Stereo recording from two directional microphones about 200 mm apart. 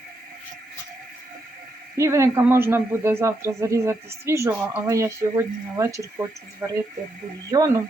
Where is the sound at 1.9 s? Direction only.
15° right (ahead or behind).